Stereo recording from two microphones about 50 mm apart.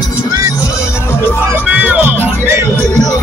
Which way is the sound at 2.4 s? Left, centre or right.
Right.